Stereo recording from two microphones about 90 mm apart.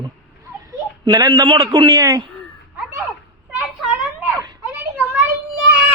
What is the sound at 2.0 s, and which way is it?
Speech, 40° right (ahead or behind).